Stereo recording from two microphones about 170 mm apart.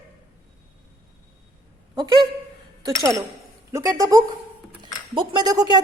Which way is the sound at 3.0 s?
20° right (ahead or behind).